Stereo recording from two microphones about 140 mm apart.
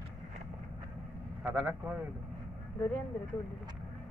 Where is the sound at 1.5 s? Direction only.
10° right (ahead or behind).